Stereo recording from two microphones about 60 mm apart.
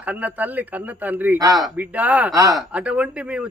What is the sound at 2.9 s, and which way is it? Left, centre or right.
Speech, right.